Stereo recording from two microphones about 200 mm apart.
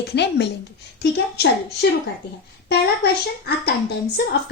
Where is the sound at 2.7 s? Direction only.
55° left (ahead or behind).